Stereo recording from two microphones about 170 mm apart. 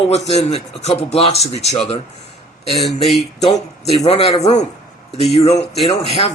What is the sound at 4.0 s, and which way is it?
Speech, 35° left (ahead or behind).